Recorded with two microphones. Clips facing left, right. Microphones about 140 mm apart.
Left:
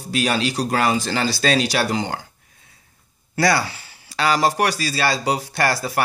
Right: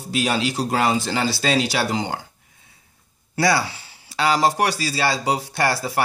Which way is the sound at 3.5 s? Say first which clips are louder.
Even; 20° right (ahead or behind).